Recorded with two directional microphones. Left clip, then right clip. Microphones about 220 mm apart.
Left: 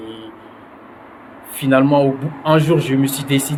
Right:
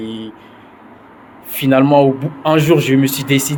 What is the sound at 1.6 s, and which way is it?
Speech, 30° right (ahead or behind).